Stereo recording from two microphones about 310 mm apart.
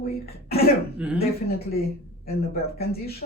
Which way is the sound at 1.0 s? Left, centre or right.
Centre.